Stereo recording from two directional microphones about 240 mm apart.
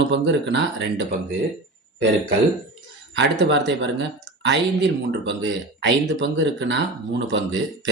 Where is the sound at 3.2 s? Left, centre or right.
Right.